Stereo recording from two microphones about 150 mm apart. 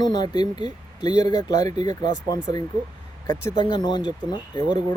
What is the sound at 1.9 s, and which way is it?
Speech, 25° left (ahead or behind).